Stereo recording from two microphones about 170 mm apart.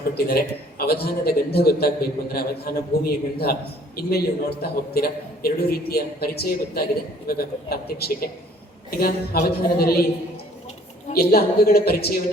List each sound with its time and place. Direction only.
0.1 s a man's voice: 65° left (ahead or behind)
11.1 s a man's voice: 65° left (ahead or behind)